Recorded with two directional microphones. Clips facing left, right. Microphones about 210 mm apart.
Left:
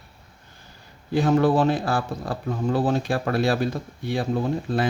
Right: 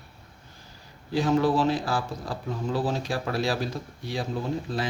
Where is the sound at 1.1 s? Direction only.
55° left (ahead or behind).